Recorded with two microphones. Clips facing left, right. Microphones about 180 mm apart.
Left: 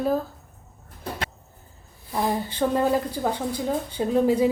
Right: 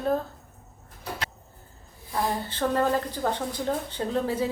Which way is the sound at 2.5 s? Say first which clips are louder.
Left 2 dB; 15° left (ahead or behind).